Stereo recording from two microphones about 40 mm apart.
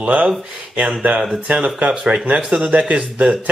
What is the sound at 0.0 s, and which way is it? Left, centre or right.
Speech, right.